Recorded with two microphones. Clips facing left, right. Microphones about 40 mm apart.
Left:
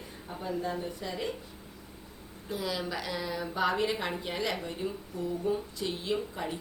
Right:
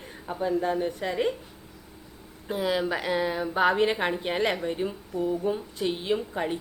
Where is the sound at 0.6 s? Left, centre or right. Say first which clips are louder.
Right 7 dB; right.